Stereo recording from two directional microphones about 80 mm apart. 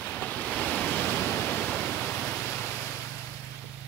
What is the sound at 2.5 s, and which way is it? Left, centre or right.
Waves, left.